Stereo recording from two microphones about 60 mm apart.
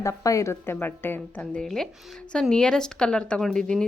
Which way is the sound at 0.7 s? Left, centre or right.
Left.